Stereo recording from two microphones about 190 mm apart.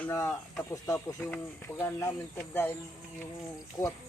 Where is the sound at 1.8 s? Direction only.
15° left (ahead or behind).